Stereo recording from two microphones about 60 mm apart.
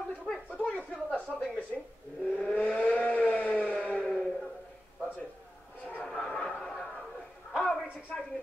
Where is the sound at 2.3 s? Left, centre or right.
Left.